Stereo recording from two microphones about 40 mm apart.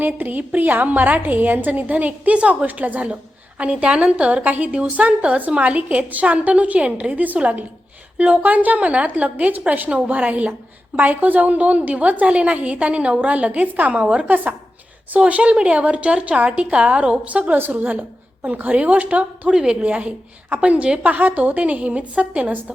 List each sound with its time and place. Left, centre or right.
0.0 s a woman's voice: right
3.6 s a woman's voice: right
8.2 s a woman's voice: right
14.3 s a woman's voice: right
15.2 s a woman's voice: right
17.5 s a woman's voice: right